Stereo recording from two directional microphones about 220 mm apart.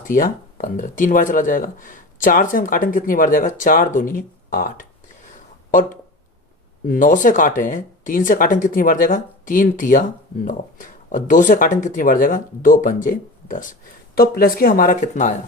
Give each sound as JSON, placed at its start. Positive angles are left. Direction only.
{"t": 0.1, "sound": "speech", "side_deg": 40}
{"t": 6.8, "sound": "speech", "side_deg": 35}